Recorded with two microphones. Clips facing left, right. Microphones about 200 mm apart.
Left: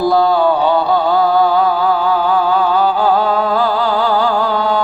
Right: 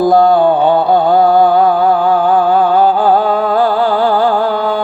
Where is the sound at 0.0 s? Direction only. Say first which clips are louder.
Right 4 dB; 50° right (ahead or behind).